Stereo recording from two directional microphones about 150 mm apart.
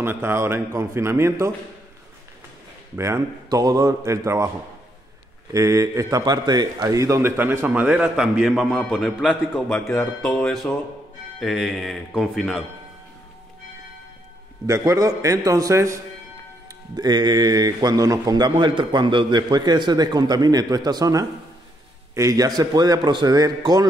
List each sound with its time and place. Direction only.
0.0 s a man's voice: 15° right (ahead or behind)
3.0 s speech: 20° right (ahead or behind)
5.5 s a man's voice: 20° right (ahead or behind); by 12.6 s centre (ahead or behind)
14.7 s speech: 20° right (ahead or behind)